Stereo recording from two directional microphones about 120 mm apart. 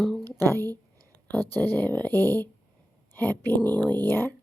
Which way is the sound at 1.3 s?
15° left (ahead or behind).